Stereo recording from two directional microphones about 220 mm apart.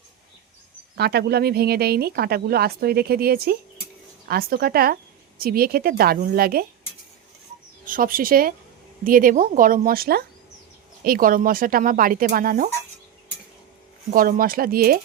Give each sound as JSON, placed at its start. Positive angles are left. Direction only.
{"t": 0.9, "sound": "speech", "side_deg": -45}
{"t": 7.9, "sound": "speech", "side_deg": -40}
{"t": 14.1, "sound": "speech", "side_deg": -40}